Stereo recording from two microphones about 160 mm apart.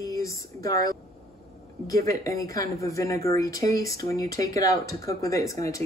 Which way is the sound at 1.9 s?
20° left (ahead or behind).